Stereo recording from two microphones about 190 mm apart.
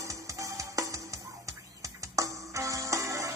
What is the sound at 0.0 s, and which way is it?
Music, 15° right (ahead or behind).